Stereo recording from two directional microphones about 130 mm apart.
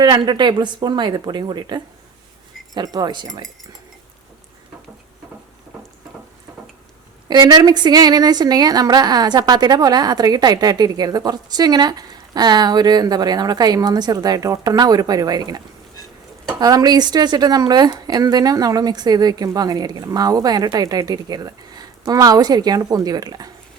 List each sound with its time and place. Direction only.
0.0 s a woman's voice: 35° right (ahead or behind)
7.3 s a woman's voice: 30° right (ahead or behind)